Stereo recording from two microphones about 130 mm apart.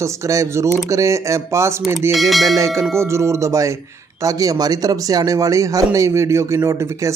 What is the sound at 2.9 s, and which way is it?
A man's voice, 20° right (ahead or behind).